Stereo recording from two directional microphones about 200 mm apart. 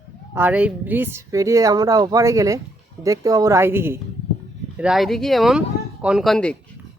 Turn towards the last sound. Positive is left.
turn(degrees=5)  # may be behind; listen again after turning